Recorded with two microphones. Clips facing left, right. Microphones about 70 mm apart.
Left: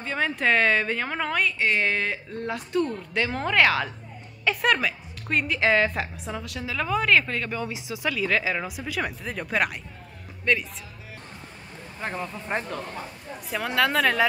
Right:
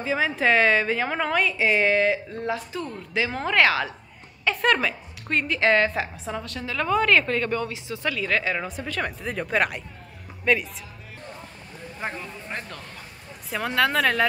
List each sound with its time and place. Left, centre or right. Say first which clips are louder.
0.0 s a woman's voice: right 2 dB; centre
12.5 s speech: left 6 dB; left
13.5 s a woman's voice: right 1 dB; centre